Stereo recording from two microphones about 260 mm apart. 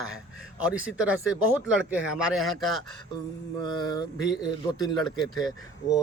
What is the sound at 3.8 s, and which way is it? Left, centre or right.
Mantra, centre.